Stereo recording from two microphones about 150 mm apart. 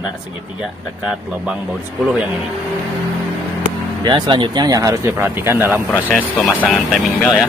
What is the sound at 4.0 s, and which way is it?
Speech, 30° right (ahead or behind).